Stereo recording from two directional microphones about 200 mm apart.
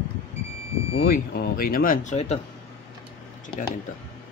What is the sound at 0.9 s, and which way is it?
Speech, 50° left (ahead or behind).